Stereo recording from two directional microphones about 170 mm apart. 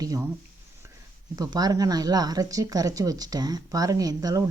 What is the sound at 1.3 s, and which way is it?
Speech, 20° right (ahead or behind).